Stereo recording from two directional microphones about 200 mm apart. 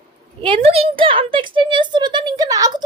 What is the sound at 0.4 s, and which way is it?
A woman's voice, 30° right (ahead or behind).